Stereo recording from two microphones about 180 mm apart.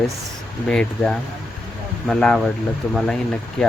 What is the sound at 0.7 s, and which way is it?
Speech, 5° left (ahead or behind).